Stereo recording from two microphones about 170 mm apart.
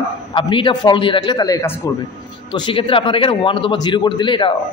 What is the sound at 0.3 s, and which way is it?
A man's voice, 30° left (ahead or behind).